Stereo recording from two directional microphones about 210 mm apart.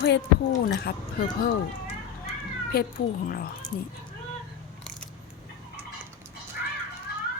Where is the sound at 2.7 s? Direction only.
45° left (ahead or behind).